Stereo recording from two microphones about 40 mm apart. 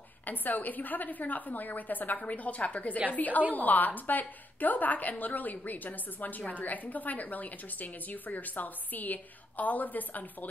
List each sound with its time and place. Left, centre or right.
0.2 s a woman's voice: left